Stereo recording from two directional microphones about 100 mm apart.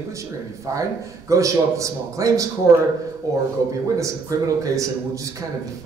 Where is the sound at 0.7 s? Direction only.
35° right (ahead or behind).